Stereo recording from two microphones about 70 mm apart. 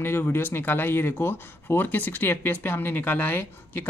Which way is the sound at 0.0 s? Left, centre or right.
Left.